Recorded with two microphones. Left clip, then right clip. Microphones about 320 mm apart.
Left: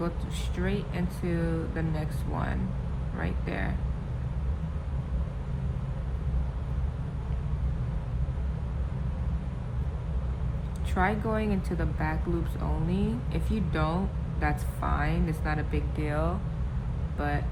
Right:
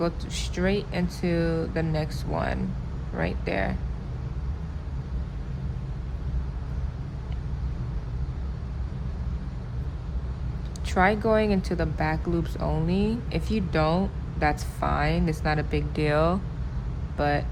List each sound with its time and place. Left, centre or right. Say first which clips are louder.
0.0 s speech: right 6 dB; right
10.9 s speech: right 7 dB; right